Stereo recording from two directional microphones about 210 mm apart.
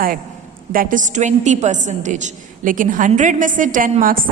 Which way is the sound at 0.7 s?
40° right (ahead or behind).